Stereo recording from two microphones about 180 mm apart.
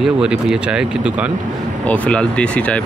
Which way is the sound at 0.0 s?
5° right (ahead or behind).